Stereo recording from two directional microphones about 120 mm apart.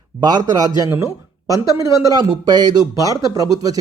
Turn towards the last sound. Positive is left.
turn(degrees=-30)  # may be behind; listen again after turning